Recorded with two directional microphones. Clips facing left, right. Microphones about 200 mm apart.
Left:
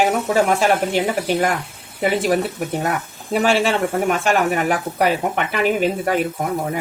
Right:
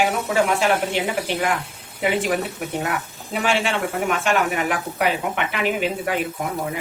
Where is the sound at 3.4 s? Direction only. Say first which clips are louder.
Left 4 dB; 40° left (ahead or behind).